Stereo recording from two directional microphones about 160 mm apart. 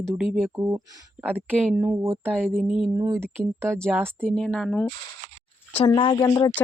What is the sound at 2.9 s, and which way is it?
Speech, 20° right (ahead or behind).